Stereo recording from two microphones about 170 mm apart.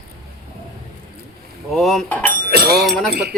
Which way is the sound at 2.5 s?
70° right (ahead or behind).